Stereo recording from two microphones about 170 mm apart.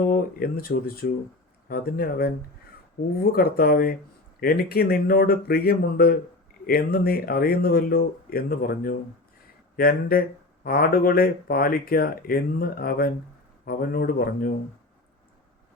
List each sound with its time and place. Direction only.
0.1 s speech: 60° left (ahead or behind)
3.3 s speech: 65° left (ahead or behind)